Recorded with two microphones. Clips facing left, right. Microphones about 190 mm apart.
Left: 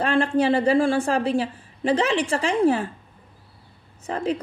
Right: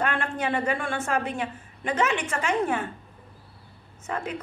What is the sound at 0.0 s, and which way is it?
A woman's voice, 30° left (ahead or behind).